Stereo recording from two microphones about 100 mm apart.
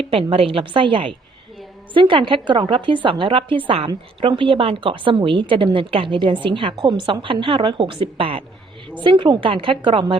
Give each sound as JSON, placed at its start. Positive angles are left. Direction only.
{"t": 0.0, "sound": "a woman's voice", "side_deg": -65}
{"t": 9.0, "sound": "a woman's voice", "side_deg": -55}